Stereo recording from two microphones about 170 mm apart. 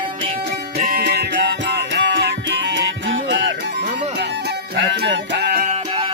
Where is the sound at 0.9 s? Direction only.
75° right (ahead or behind).